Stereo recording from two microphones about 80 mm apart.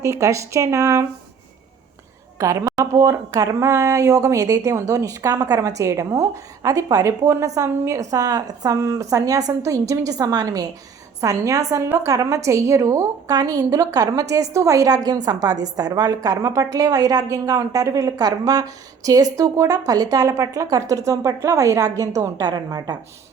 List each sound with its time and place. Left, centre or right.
0.0 s speech: right
2.4 s a woman's voice: right
5.3 s a woman's voice: right